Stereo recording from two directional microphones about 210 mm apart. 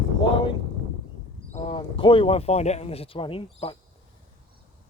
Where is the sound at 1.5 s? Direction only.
25° left (ahead or behind).